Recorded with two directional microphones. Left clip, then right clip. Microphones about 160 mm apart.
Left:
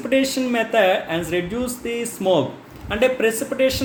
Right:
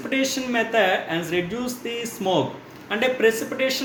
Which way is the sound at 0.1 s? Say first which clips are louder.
Left 4 dB; 45° left (ahead or behind).